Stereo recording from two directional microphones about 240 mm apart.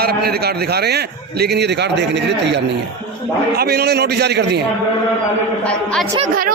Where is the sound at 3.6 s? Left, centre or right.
Right.